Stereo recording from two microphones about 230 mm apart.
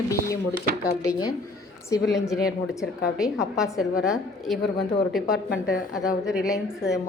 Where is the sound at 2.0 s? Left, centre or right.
Centre.